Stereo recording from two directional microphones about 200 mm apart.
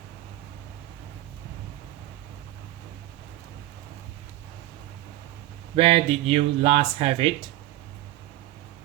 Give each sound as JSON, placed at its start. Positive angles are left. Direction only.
{"t": 5.7, "sound": "speech", "side_deg": -30}